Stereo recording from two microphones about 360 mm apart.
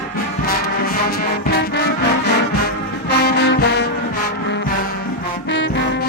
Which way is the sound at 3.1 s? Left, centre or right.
Left.